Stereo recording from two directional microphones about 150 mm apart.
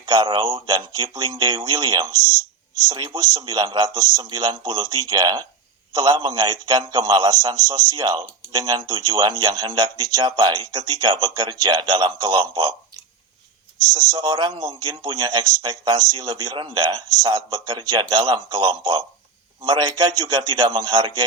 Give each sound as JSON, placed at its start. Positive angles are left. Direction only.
{"t": 0.0, "sound": "a man's voice", "side_deg": -30}
{"t": 13.8, "sound": "a man's voice", "side_deg": -25}